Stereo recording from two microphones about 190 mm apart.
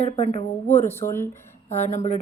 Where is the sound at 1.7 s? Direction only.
40° left (ahead or behind).